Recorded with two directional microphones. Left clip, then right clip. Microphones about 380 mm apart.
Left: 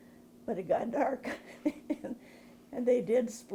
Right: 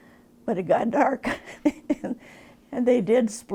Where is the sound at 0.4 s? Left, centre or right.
Right.